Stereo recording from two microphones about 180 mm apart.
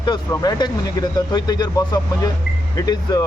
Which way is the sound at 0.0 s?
25° left (ahead or behind).